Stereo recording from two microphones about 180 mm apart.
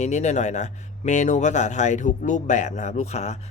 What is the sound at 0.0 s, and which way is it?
Speech, 40° left (ahead or behind).